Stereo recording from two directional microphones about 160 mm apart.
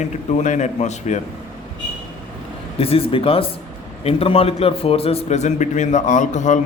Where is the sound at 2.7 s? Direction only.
35° left (ahead or behind).